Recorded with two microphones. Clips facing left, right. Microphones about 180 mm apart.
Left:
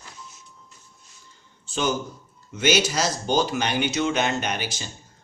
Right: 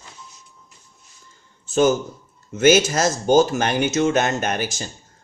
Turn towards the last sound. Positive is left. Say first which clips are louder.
# right 4 dB
turn(degrees=-45)  # may be behind; listen again after turning